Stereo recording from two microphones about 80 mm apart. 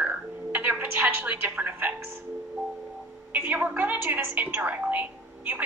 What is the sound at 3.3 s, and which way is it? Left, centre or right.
Speech, right.